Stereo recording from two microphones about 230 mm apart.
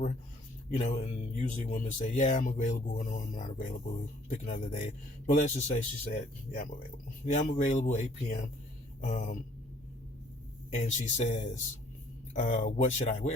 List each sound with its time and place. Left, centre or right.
0.7 s speech: left
10.7 s speech: left